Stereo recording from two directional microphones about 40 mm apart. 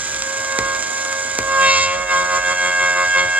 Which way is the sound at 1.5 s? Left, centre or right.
Right.